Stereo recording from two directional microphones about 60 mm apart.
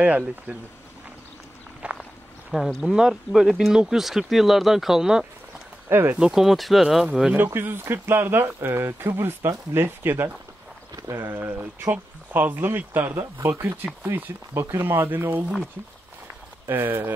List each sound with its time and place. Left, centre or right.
0.0 s speech: right
1.8 s walk: right
2.5 s speech: centre
5.9 s speech: right
6.1 s speech: centre
7.3 s speech: right
11.3 s speech: right
13.1 s speech: right
16.6 s speech: right